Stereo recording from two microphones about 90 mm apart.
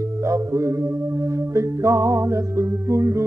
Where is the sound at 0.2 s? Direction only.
35° right (ahead or behind).